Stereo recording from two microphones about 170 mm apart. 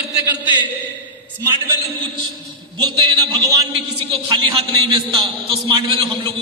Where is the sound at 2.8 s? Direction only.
25° right (ahead or behind).